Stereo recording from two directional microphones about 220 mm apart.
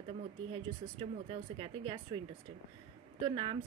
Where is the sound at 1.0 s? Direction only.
25° right (ahead or behind).